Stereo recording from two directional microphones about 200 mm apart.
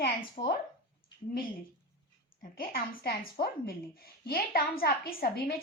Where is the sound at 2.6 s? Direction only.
50° left (ahead or behind).